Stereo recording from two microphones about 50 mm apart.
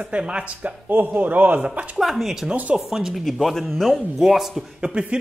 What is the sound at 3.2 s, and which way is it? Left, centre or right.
Speech, centre.